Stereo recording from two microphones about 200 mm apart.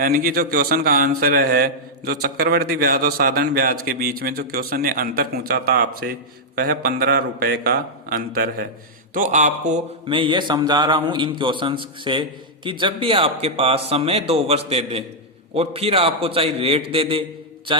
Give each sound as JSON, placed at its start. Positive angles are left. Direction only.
{"t": 0.0, "sound": "a man's voice", "side_deg": -45}
{"t": 10.1, "sound": "a man's voice", "side_deg": -25}